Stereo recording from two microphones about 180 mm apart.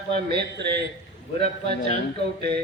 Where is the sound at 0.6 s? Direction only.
70° right (ahead or behind).